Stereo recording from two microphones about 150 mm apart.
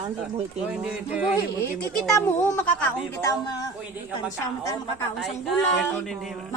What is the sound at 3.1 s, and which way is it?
Speech, 20° left (ahead or behind).